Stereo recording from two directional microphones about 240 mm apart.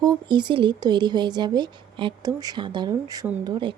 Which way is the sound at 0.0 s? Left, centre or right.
Centre.